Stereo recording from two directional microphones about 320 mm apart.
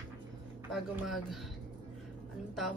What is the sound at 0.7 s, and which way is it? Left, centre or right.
Speech, centre.